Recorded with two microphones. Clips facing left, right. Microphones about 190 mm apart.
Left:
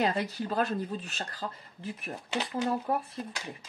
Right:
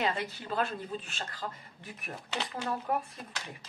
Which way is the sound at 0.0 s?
40° left (ahead or behind).